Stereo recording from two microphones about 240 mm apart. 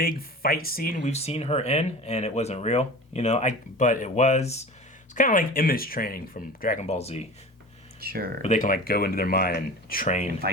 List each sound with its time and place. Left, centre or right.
0.0 s speech: left
8.0 s speech: right
8.4 s speech: left